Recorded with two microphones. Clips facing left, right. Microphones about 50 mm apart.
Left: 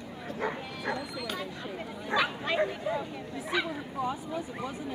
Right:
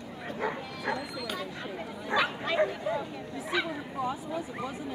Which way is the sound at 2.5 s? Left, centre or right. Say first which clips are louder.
Right 2 dB; left.